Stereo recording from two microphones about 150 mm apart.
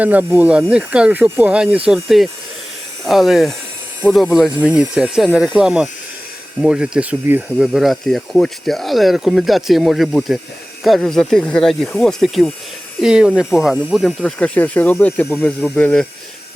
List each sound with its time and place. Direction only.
0.0 s speech: 10° right (ahead or behind); by 16.0 s 10° left (ahead or behind)